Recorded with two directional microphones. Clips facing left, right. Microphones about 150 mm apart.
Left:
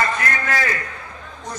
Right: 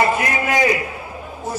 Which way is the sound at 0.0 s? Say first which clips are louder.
Right 4 dB; 15° right (ahead or behind).